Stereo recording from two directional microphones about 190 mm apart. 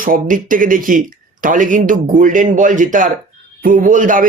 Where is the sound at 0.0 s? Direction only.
45° right (ahead or behind).